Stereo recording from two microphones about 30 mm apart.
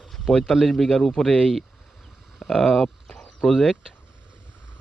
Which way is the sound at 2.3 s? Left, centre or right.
Centre.